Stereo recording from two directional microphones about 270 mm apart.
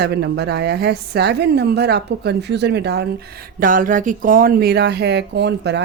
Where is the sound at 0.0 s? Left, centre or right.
Right.